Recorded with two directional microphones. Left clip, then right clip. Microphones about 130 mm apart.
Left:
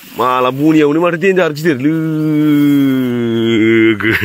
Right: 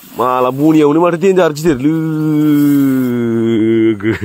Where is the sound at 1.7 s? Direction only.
25° right (ahead or behind).